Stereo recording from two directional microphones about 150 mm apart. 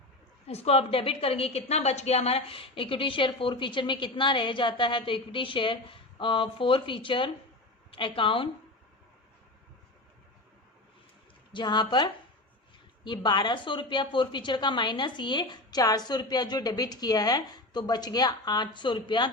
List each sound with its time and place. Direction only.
0.4 s a woman's voice: 45° left (ahead or behind)
11.5 s a woman's voice: 30° left (ahead or behind)